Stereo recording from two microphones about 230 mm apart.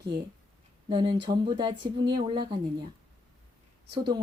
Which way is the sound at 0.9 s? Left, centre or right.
Centre.